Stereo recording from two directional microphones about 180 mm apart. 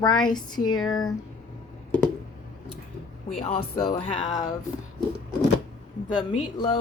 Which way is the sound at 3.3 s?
30° left (ahead or behind).